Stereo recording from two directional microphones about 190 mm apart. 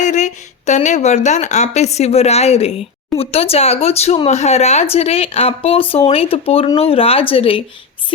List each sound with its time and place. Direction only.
0.0 s speech: 40° left (ahead or behind)